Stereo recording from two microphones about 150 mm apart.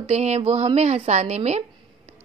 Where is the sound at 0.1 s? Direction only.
45° right (ahead or behind).